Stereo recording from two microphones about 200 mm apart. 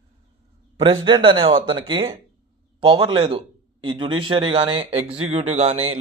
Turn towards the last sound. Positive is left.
turn(degrees=-30)  # may be behind; listen again after turning